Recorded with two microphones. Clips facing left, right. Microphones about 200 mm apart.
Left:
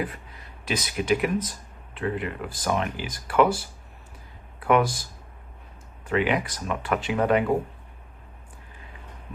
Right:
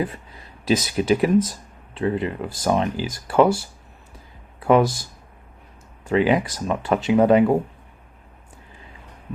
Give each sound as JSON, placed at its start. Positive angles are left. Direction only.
{"t": 0.7, "sound": "speech", "side_deg": -30}
{"t": 4.6, "sound": "speech", "side_deg": -30}
{"t": 6.1, "sound": "speech", "side_deg": -30}